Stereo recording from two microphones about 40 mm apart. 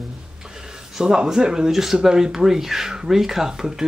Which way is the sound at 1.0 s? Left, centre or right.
Centre.